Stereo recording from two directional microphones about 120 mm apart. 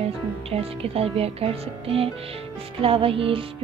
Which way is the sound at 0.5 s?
55° right (ahead or behind).